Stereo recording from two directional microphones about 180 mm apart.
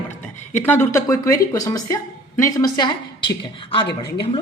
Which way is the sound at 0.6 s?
10° left (ahead or behind).